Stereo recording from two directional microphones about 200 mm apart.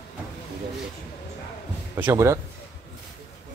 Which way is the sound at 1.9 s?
10° right (ahead or behind).